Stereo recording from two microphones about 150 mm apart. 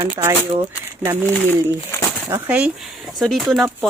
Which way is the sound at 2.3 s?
10° right (ahead or behind).